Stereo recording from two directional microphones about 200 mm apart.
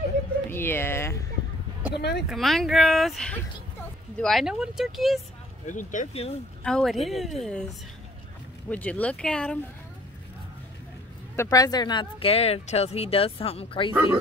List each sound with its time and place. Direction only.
0.5 s speech: 10° left (ahead or behind)
2.0 s speech: 55° left (ahead or behind)
2.2 s speech: centre (ahead or behind)
5.7 s speech: 40° left (ahead or behind)
6.6 s speech: centre (ahead or behind)
8.6 s speech: 10° left (ahead or behind)
11.3 s speech: 20° left (ahead or behind)